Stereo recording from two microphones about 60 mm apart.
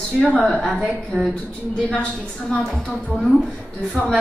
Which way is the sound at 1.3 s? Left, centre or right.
Centre.